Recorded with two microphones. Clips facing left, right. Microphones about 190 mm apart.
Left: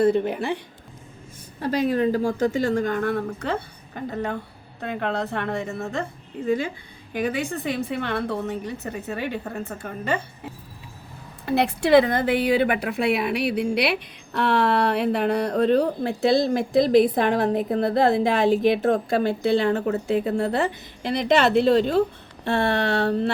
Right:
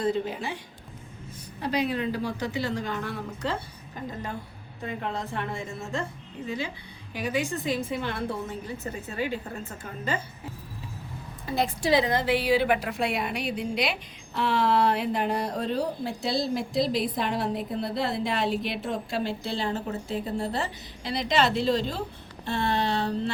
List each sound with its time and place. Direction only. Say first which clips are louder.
0.0 s a woman's voice: left 7 dB; 60° left (ahead or behind)
1.6 s a woman's voice: left 6 dB; 45° left (ahead or behind); by 6.1 s 65° left (ahead or behind)
7.1 s a woman's voice: left 3 dB; 55° left (ahead or behind)
11.4 s a woman's voice: left 5 dB; 65° left (ahead or behind)